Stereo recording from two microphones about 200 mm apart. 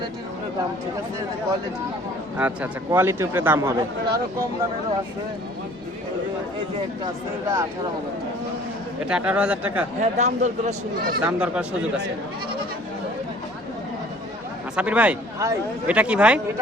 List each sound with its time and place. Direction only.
2.4 s speech: 10° right (ahead or behind)
9.0 s speech: 5° right (ahead or behind)
10.0 s speech: 35° right (ahead or behind)
11.2 s speech: 5° right (ahead or behind)
14.8 s speech: 5° right (ahead or behind)